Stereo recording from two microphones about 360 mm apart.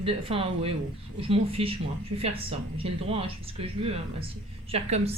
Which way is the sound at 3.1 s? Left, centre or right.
Centre.